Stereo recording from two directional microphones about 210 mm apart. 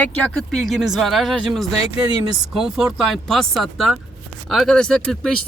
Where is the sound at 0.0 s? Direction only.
5° left (ahead or behind).